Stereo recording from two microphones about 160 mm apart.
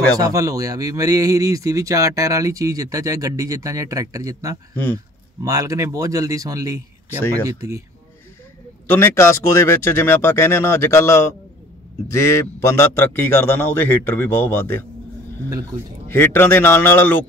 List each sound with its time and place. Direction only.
0.2 s speech: 20° right (ahead or behind)
8.9 s a man's voice: 15° left (ahead or behind)
16.1 s a man's voice: 15° left (ahead or behind)